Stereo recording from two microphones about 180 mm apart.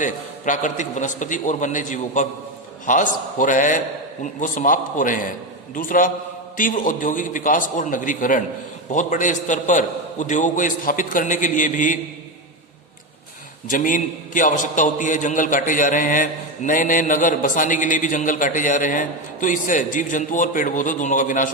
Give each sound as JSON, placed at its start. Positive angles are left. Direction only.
{"t": 0.0, "sound": "a man's voice", "side_deg": 45}
{"t": 13.7, "sound": "a man's voice", "side_deg": 50}